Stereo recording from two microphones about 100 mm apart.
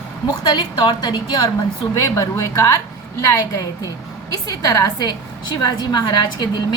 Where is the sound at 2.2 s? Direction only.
35° left (ahead or behind).